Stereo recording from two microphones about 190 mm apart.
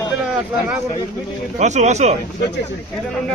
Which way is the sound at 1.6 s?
35° right (ahead or behind).